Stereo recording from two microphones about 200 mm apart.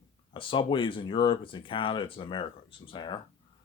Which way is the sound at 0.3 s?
25° left (ahead or behind).